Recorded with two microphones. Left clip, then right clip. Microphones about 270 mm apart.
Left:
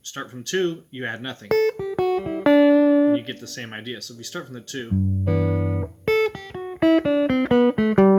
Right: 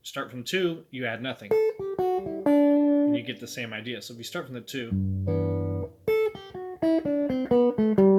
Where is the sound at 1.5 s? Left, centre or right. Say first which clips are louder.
Left 4 dB; left.